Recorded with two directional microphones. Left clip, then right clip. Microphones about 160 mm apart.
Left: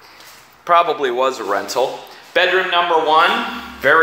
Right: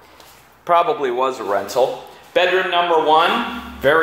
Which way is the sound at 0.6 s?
10° right (ahead or behind).